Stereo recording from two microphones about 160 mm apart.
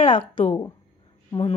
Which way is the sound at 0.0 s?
30° left (ahead or behind).